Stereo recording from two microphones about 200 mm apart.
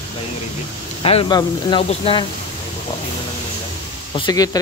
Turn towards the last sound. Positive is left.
turn(degrees=20)  # may be behind; listen again after turning